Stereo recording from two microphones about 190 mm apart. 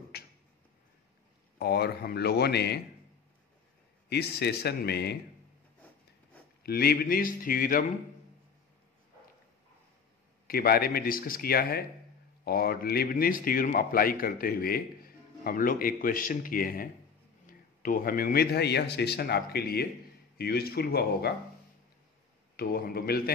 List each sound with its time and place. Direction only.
0.1 s a sound: 55° left (ahead or behind)
1.6 s speech: 60° left (ahead or behind)
4.1 s speech: 60° left (ahead or behind)
6.6 s a man's voice: 55° left (ahead or behind)
10.4 s a man's voice: 55° left (ahead or behind)
22.6 s a man's voice: 55° left (ahead or behind)